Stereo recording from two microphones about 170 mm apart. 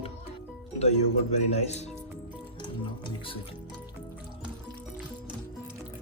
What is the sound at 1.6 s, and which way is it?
Speech, 40° left (ahead or behind).